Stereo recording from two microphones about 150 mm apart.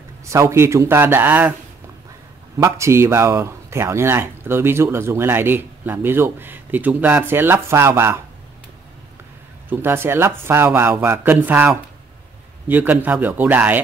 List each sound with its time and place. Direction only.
0.2 s speech: 20° right (ahead or behind)
2.6 s speech: 20° right (ahead or behind)
9.7 s speech: 15° right (ahead or behind)